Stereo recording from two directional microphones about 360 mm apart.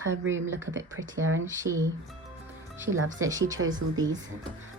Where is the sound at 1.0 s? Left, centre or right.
Right.